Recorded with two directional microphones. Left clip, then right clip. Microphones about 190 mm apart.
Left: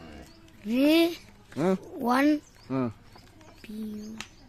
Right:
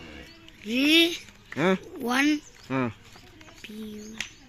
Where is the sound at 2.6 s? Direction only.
Centre (ahead or behind).